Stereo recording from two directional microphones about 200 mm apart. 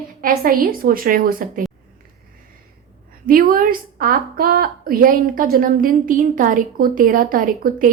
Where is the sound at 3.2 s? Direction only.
45° right (ahead or behind).